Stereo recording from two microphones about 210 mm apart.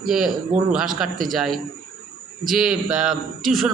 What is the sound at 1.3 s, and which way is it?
A man's voice, centre (ahead or behind).